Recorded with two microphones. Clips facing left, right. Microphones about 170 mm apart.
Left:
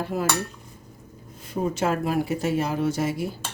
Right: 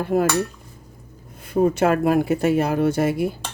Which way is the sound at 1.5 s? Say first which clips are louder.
Right 7 dB; 60° right (ahead or behind).